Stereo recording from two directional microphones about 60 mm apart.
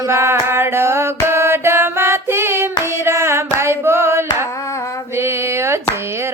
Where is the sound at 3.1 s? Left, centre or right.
Right.